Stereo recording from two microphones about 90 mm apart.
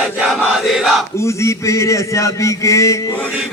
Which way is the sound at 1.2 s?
35° left (ahead or behind).